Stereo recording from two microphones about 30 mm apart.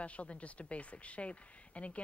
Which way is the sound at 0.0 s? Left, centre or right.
Left.